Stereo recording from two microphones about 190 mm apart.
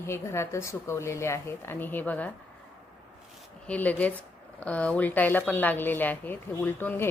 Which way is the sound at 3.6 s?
5° left (ahead or behind).